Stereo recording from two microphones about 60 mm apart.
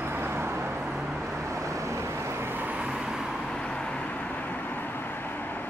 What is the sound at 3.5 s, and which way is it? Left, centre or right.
Vehicle, centre.